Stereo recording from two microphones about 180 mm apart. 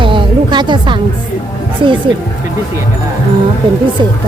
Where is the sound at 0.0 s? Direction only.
25° right (ahead or behind).